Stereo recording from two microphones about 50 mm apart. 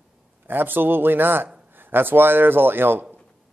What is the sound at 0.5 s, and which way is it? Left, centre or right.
Speech, right.